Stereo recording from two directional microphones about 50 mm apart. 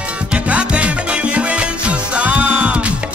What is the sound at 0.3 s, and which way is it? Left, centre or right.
Music, right.